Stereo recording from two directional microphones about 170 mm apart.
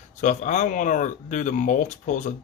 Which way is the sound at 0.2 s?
45° left (ahead or behind).